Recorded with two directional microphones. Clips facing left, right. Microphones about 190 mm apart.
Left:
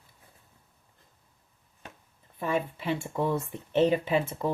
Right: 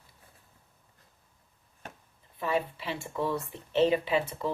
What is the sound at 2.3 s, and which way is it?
Speech, 50° left (ahead or behind).